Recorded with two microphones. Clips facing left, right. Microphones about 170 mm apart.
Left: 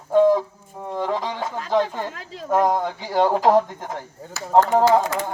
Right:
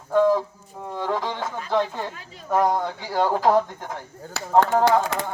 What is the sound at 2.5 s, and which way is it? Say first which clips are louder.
Speech: left 2 dB; centre (ahead or behind).